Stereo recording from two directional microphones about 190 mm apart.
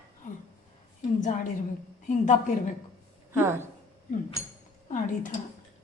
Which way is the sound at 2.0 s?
40° left (ahead or behind).